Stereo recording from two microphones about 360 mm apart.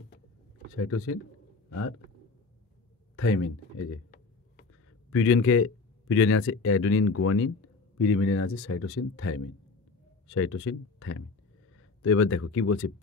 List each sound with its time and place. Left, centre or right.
0.7 s speech: left
3.2 s speech: left
5.1 s speech: left